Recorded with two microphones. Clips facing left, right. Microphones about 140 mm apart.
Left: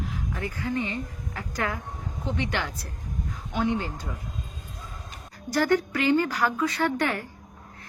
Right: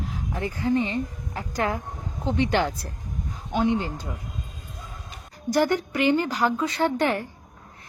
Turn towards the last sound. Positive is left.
turn(degrees=-25)  # may be behind; listen again after turning